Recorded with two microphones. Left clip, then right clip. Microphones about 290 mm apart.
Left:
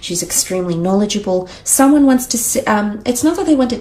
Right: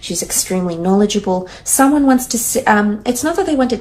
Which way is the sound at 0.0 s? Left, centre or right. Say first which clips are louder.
Left 1 dB; left.